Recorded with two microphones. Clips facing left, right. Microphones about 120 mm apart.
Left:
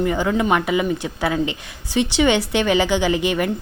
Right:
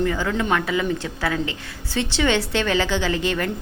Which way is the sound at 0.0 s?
20° left (ahead or behind).